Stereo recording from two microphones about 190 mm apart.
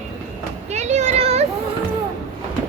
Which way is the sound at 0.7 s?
35° right (ahead or behind).